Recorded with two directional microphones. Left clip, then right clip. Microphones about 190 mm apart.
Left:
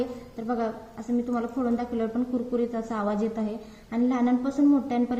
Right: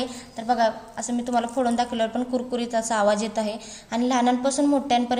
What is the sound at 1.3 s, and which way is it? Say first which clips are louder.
A woman's voice: right 9 dB; 45° right (ahead or behind).